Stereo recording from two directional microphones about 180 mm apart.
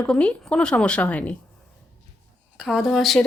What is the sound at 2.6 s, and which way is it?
Speech, centre (ahead or behind).